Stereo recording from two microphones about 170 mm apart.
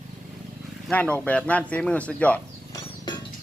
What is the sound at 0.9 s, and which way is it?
Speech, 10° left (ahead or behind).